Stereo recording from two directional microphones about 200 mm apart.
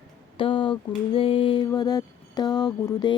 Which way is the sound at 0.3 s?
25° left (ahead or behind).